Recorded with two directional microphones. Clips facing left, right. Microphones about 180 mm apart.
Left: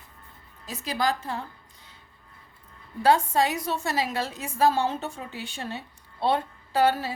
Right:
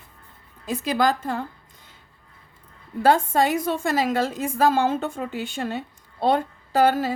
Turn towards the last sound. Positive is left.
turn(degrees=-45)  # may be behind; listen again after turning